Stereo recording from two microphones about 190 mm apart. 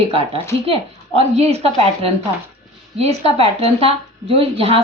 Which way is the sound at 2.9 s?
30° right (ahead or behind).